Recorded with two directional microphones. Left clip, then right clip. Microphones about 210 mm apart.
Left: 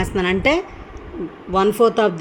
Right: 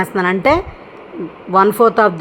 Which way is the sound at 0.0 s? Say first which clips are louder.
Right 4 dB; 5° left (ahead or behind).